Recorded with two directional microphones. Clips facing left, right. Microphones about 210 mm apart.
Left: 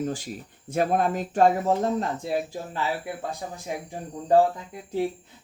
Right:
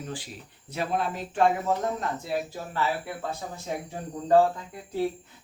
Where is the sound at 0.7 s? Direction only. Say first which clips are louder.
Left 6 dB; 50° left (ahead or behind).